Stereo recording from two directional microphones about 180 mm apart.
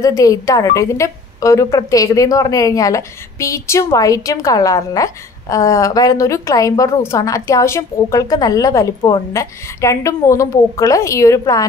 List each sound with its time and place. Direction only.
0.0 s a woman's voice: 20° left (ahead or behind)